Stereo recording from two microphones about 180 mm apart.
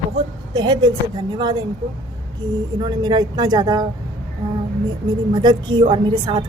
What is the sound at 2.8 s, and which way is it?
A woman's voice, 25° right (ahead or behind).